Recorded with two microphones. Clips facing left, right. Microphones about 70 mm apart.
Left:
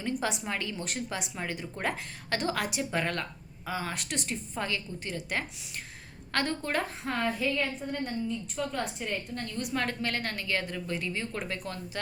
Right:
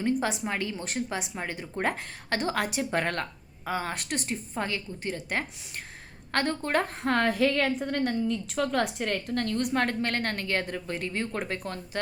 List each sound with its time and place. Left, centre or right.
0.0 s a woman's voice: right